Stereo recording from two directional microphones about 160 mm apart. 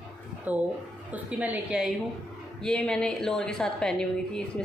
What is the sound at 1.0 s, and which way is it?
Speech, 10° right (ahead or behind).